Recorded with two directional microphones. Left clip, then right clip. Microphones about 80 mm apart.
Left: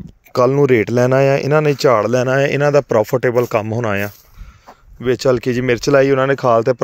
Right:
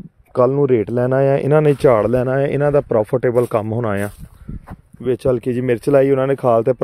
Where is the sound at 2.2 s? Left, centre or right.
Centre.